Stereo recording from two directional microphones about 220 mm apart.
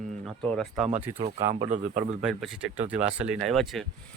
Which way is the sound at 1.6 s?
35° right (ahead or behind).